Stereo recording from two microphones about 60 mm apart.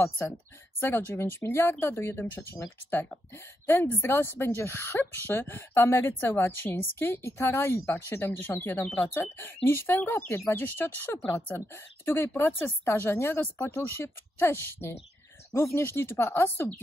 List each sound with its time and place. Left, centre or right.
0.2 s speech: left
8.3 s speech: left
10.5 s speech: left
13.4 s speech: left
13.7 s speech: left